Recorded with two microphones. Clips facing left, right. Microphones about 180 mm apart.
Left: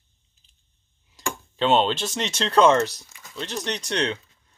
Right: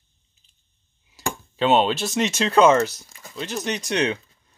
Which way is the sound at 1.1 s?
5° right (ahead or behind).